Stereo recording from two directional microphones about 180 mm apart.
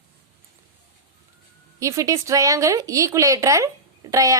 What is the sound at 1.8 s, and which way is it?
Speech, 15° right (ahead or behind).